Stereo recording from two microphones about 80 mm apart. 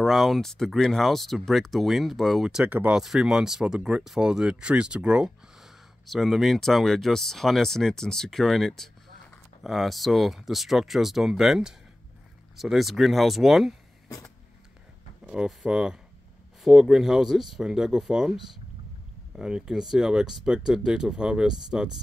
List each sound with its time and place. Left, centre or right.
0.0 s speech: centre
2.7 s speech: centre
3.0 s speech: centre
15.2 s speech: centre